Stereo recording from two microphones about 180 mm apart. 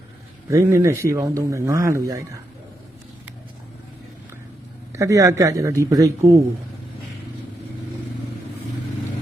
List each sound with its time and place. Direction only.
0.4 s a man's voice: 15° right (ahead or behind)
4.9 s a man's voice: 15° right (ahead or behind)